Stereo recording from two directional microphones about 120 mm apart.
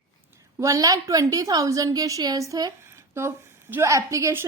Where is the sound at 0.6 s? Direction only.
30° right (ahead or behind).